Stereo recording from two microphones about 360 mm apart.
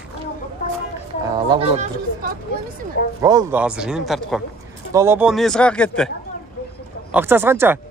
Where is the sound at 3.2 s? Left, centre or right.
Centre.